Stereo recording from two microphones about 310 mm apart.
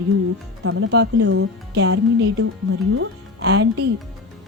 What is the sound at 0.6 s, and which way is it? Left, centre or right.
A woman's voice, right.